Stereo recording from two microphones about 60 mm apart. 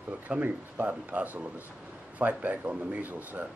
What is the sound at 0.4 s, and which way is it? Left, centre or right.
Speech, right.